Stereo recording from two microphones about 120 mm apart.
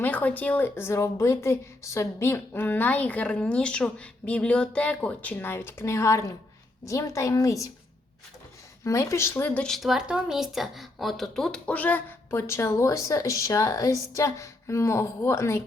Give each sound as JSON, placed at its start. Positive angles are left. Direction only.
{"t": 0.0, "sound": "a woman's voice", "side_deg": 15}
{"t": 8.8, "sound": "speech", "side_deg": 25}
{"t": 9.6, "sound": "speech", "side_deg": 0}